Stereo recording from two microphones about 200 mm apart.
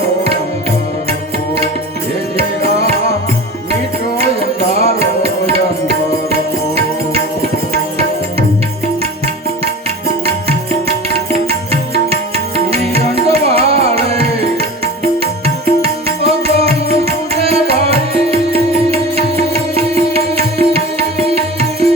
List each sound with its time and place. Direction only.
4.8 s tabla: 30° right (ahead or behind)
7.7 s music: 30° right (ahead or behind)
12.5 s music: 30° right (ahead or behind)